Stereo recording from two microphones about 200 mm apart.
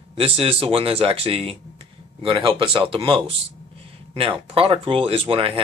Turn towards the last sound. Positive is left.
turn(degrees=-30)  # may be behind; listen again after turning